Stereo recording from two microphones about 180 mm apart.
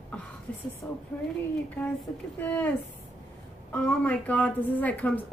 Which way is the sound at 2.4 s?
10° left (ahead or behind).